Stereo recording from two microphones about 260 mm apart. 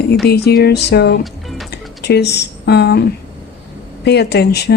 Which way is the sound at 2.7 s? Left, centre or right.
Left.